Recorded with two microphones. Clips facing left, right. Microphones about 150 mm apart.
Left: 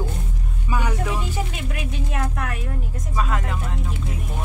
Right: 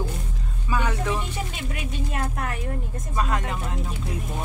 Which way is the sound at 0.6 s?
15° left (ahead or behind).